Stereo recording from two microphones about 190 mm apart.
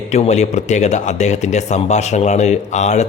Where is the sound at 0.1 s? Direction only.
35° left (ahead or behind).